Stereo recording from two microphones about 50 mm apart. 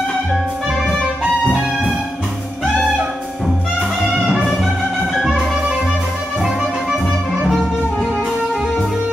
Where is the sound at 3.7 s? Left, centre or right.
Centre.